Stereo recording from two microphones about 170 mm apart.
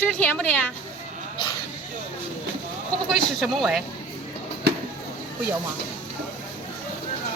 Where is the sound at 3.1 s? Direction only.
Centre (ahead or behind).